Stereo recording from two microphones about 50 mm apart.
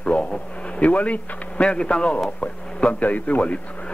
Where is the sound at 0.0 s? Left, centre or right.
Left.